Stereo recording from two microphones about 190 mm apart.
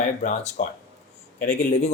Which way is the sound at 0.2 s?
40° left (ahead or behind).